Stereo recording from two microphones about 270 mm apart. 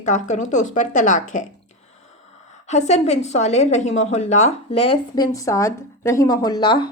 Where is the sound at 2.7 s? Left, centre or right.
Left.